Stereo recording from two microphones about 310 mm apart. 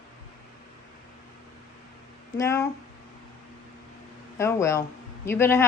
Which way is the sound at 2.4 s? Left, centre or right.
Centre.